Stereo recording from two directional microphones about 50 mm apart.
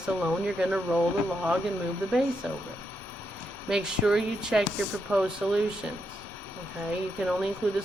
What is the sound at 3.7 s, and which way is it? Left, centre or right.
Speech, centre.